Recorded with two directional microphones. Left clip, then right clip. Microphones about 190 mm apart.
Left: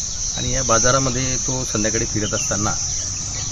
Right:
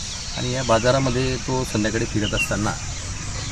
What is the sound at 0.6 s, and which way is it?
Speech, 25° left (ahead or behind).